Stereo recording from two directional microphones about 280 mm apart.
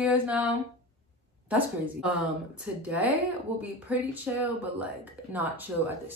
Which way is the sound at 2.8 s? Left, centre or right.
Centre.